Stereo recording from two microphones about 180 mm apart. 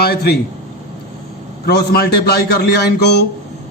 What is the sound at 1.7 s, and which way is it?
A man's voice, 60° left (ahead or behind).